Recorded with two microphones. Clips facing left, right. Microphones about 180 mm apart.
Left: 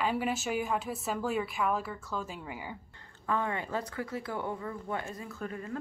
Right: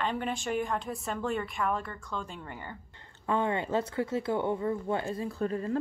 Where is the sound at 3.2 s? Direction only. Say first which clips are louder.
Right 4 dB; 25° right (ahead or behind).